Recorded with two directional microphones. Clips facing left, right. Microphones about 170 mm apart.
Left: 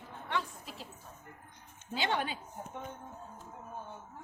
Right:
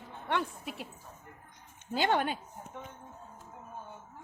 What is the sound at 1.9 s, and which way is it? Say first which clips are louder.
Speech: right 5 dB; 45° right (ahead or behind).